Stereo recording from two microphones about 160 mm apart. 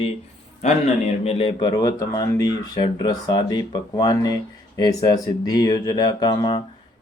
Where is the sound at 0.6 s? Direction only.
45° left (ahead or behind).